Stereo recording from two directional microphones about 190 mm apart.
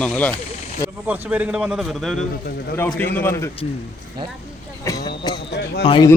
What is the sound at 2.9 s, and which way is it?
Speech, 10° left (ahead or behind).